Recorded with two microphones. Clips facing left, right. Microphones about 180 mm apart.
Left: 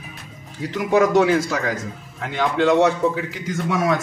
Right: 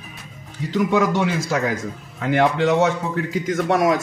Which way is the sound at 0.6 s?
90° left.